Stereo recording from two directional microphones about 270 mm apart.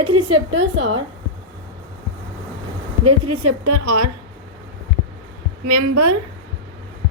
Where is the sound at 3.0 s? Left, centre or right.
Right.